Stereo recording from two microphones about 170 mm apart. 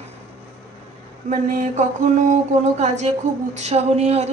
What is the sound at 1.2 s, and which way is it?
Mantra, 45° right (ahead or behind).